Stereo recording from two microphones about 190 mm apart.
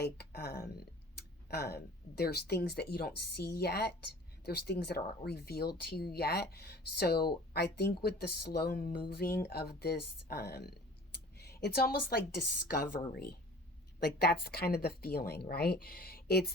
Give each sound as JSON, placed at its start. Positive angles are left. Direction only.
{"t": 0.0, "sound": "a woman's voice", "side_deg": 60}